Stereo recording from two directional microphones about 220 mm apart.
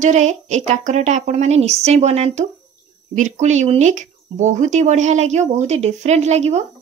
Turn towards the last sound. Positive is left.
turn(degrees=-30)  # may be behind; listen again after turning